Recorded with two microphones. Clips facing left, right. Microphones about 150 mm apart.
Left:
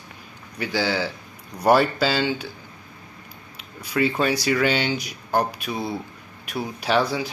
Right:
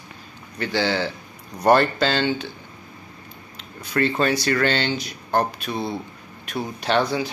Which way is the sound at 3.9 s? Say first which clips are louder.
Right 1 dB; 5° left (ahead or behind).